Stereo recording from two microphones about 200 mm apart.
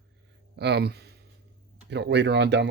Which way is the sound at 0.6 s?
55° right (ahead or behind).